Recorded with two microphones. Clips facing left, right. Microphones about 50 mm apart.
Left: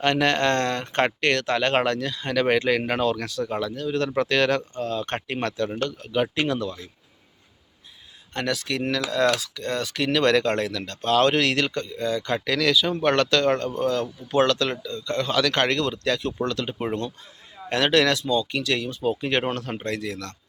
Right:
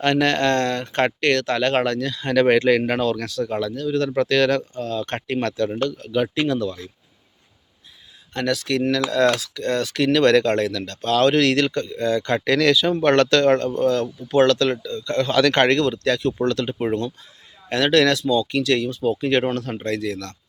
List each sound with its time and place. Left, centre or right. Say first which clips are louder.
0.0 s speech: right 2 dB; centre
8.4 s speech: right 5 dB; centre
18.9 s speech: right 4 dB; centre